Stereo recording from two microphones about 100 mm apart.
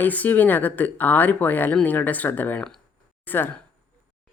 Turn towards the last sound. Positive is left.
turn(degrees=20)  # may be behind; listen again after turning